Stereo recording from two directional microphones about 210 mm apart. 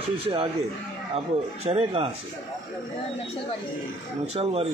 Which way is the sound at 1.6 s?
25° right (ahead or behind).